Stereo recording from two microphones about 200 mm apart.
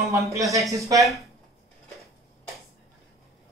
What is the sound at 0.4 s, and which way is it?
Speech, 15° right (ahead or behind).